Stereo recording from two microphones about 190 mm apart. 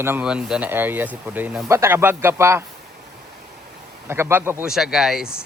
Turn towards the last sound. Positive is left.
turn(degrees=0)  # may be behind; listen again after turning